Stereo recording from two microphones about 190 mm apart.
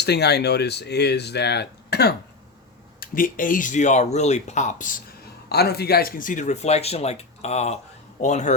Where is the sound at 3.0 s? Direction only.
50° left (ahead or behind).